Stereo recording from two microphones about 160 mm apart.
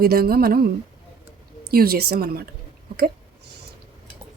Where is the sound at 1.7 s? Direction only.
75° right (ahead or behind).